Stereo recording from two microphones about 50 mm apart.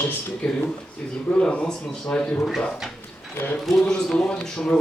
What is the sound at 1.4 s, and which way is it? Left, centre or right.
Speech, centre.